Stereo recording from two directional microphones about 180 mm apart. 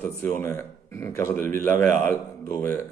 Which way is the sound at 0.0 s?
15° left (ahead or behind).